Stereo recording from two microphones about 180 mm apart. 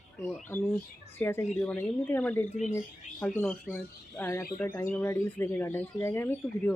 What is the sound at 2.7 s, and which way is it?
Speech, 5° left (ahead or behind).